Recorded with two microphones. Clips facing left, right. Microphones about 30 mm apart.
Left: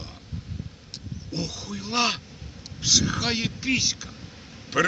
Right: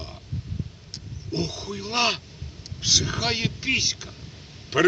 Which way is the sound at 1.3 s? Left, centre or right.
Centre.